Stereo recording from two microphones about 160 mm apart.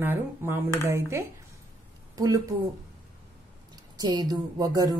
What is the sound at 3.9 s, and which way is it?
Speech, 25° right (ahead or behind).